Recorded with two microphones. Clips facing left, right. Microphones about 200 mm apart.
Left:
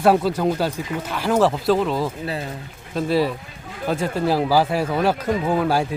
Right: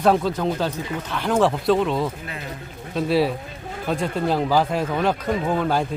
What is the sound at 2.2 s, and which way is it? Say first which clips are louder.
Speech: left 7 dB; 35° left (ahead or behind).